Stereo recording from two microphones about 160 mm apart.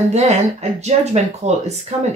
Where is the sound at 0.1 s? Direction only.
45° right (ahead or behind).